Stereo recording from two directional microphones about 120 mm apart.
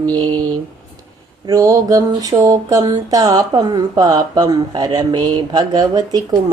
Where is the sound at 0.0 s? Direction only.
35° right (ahead or behind).